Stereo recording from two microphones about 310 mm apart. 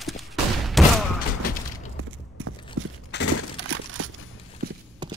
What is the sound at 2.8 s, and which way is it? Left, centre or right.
Horse, right.